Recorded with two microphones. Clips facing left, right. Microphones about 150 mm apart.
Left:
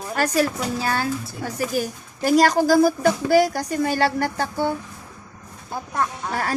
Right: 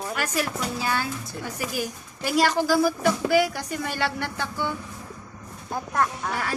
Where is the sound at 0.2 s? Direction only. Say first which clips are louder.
Left 9 dB; 40° left (ahead or behind).